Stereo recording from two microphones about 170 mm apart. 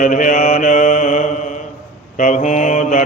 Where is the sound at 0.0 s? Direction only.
50° left (ahead or behind).